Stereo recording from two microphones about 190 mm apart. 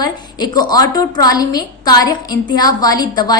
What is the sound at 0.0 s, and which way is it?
A woman's voice, 20° left (ahead or behind).